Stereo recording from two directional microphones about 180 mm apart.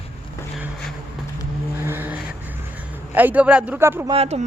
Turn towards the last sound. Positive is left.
turn(degrees=-35)  # may be behind; listen again after turning